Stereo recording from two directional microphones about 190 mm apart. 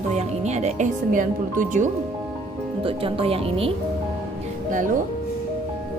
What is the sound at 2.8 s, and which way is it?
Speech, 30° right (ahead or behind).